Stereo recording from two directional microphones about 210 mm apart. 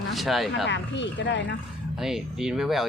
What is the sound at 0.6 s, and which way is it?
Speech, 60° left (ahead or behind).